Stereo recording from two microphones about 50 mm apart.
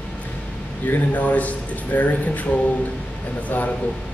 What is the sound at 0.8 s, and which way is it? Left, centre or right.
Speech, left.